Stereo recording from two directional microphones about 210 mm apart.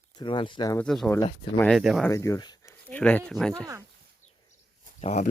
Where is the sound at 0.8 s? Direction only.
5° left (ahead or behind).